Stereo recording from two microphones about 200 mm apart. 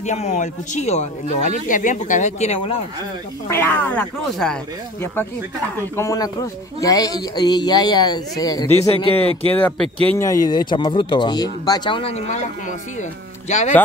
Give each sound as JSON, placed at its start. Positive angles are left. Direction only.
{"t": 0.0, "sound": "speech", "side_deg": 35}
{"t": 3.4, "sound": "speech", "side_deg": 10}
{"t": 5.9, "sound": "speech", "side_deg": 15}
{"t": 9.5, "sound": "speech", "side_deg": 10}
{"t": 13.5, "sound": "speech", "side_deg": 35}